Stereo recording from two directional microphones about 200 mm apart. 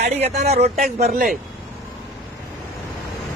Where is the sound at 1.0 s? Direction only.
45° right (ahead or behind).